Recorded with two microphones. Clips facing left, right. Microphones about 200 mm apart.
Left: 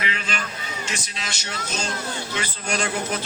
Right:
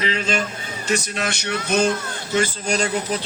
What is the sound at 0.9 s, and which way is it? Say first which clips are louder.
Music: right 10 dB; 60° right (ahead or behind).